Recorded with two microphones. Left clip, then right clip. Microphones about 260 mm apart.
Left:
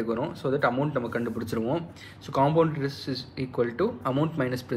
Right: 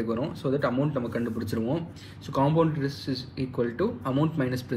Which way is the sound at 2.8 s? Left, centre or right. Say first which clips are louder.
Even; centre.